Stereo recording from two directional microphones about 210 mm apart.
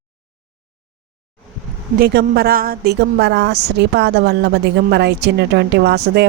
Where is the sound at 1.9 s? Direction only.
50° right (ahead or behind).